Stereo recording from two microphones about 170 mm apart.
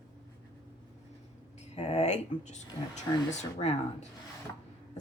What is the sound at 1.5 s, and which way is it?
Speech, 40° left (ahead or behind).